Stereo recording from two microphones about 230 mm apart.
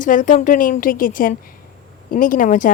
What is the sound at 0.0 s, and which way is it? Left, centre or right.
A woman's voice, left.